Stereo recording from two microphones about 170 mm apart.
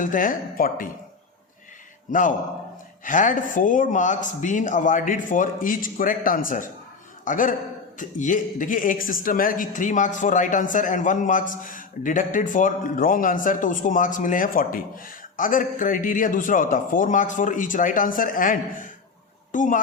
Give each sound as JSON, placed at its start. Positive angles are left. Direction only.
{"t": 0.0, "sound": "a man's voice", "side_deg": 50}
{"t": 2.0, "sound": "a man's voice", "side_deg": 50}